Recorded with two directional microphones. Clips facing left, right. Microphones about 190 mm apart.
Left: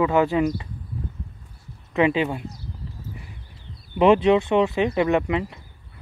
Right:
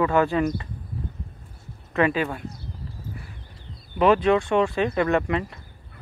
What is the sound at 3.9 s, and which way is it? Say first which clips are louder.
Speech: left 2 dB; 25° left (ahead or behind).